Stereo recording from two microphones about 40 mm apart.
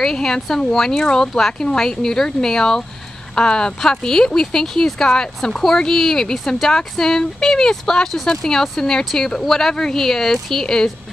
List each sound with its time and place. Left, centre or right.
0.0 s speech: centre